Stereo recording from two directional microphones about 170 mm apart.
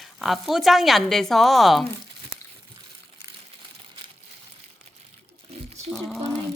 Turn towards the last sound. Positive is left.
turn(degrees=5)  # may be behind; listen again after turning